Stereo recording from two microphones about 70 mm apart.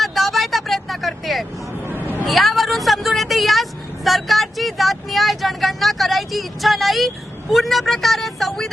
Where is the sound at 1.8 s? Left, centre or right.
Right.